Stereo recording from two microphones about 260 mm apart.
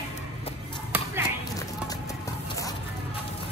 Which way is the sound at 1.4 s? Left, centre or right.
Centre.